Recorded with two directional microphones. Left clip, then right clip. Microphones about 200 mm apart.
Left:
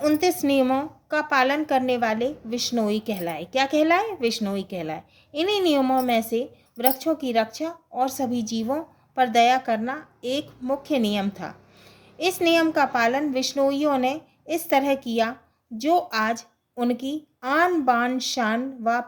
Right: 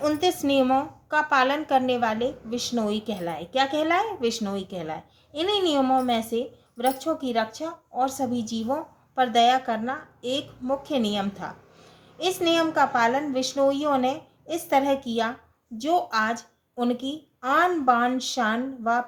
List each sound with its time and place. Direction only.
0.0 s a woman's voice: 35° left (ahead or behind)